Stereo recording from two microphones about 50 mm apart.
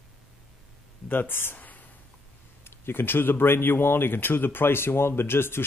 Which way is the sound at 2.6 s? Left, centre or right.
Left.